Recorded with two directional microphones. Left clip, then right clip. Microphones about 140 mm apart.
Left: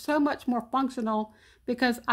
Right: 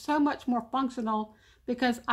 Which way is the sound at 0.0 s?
40° left (ahead or behind).